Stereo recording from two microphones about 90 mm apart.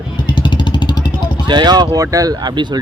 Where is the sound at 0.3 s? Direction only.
65° left (ahead or behind).